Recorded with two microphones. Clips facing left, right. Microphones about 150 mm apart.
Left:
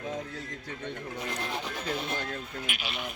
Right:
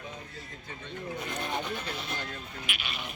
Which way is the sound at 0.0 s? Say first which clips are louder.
Left 8 dB; 85° left.